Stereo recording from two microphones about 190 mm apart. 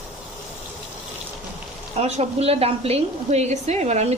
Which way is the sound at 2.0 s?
35° right (ahead or behind).